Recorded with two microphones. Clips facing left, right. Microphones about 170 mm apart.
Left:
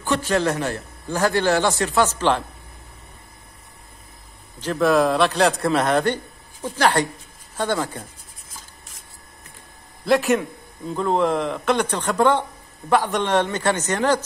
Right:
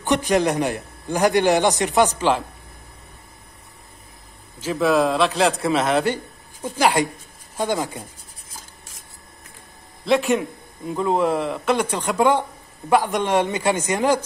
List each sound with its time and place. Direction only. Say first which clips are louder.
0.0 s a man's voice: right 2 dB; 20° right (ahead or behind)
4.6 s a man's voice: left 1 dB; 5° right (ahead or behind)
10.0 s a man's voice: even; centre (ahead or behind)